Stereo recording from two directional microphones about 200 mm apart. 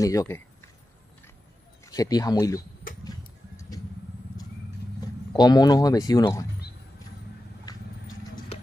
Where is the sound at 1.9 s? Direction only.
15° left (ahead or behind).